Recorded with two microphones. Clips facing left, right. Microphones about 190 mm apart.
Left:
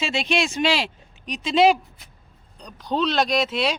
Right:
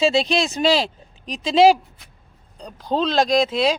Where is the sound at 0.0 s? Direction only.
35° right (ahead or behind).